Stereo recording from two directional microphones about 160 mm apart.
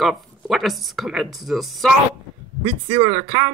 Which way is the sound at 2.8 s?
25° right (ahead or behind).